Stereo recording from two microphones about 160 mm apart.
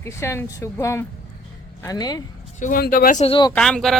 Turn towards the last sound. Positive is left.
turn(degrees=0)  # may be behind; listen again after turning